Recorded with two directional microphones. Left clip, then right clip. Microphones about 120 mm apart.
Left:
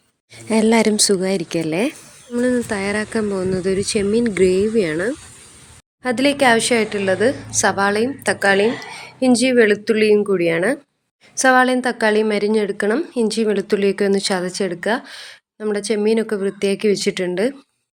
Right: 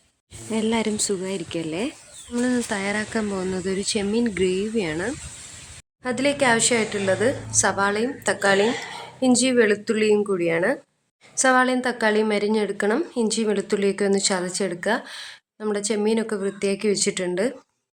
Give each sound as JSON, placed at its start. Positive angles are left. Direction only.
{"t": 0.5, "sound": "a woman's voice", "side_deg": 70}
{"t": 2.4, "sound": "a woman's voice", "side_deg": 25}
{"t": 6.0, "sound": "a woman's voice", "side_deg": 35}